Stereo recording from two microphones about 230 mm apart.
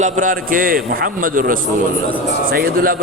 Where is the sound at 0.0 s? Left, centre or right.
Right.